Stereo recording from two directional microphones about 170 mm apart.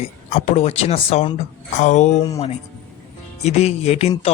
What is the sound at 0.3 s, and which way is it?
Speech, 40° left (ahead or behind).